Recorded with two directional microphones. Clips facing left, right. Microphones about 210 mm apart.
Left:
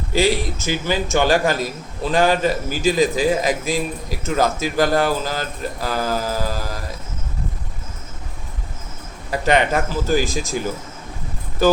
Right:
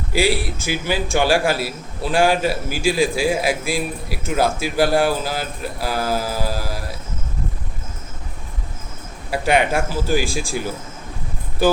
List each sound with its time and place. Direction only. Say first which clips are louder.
0.1 s a man's voice: left 1 dB; 10° right (ahead or behind)
9.3 s a man's voice: even; 10° right (ahead or behind)